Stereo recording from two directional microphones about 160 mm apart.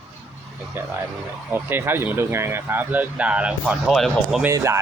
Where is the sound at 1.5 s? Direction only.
15° right (ahead or behind).